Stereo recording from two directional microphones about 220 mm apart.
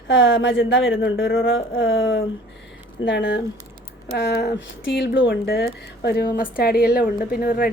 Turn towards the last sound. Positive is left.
turn(degrees=40)  # may be behind; listen again after turning